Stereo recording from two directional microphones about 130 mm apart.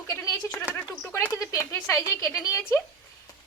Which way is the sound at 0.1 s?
25° left (ahead or behind).